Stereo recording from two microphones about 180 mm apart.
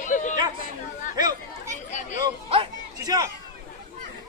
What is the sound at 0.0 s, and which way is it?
Chatter, 45° left (ahead or behind).